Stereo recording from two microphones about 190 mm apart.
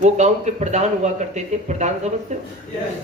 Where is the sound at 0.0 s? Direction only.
40° right (ahead or behind).